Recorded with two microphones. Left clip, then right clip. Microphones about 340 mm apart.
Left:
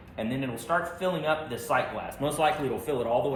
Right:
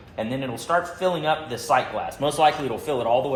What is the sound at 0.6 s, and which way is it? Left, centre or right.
Speech, centre.